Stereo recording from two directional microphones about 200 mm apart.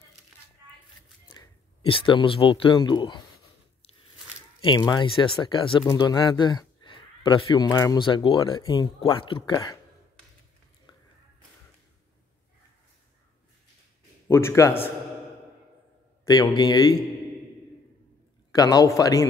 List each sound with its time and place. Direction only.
1.9 s speech: 25° left (ahead or behind)
4.6 s speech: 20° left (ahead or behind)
14.2 s a man's voice: 15° left (ahead or behind)
16.3 s speech: 20° left (ahead or behind)
18.5 s a man's voice: 20° left (ahead or behind)